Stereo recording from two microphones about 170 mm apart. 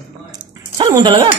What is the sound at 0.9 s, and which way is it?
Speech, 25° right (ahead or behind).